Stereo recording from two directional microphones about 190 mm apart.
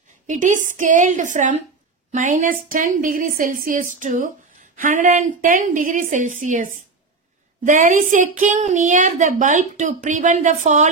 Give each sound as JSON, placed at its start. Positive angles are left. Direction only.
{"t": 0.3, "sound": "a woman's voice", "side_deg": -40}